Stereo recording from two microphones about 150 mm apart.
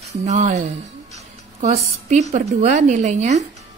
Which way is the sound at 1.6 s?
50° right (ahead or behind).